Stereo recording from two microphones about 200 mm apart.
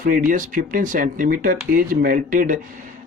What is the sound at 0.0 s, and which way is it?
Speech, 45° right (ahead or behind).